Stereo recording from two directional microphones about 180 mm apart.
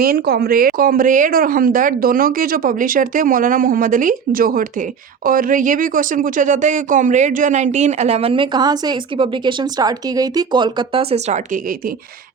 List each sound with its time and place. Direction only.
0.0 s speech: 60° right (ahead or behind); by 11.6 s 35° right (ahead or behind)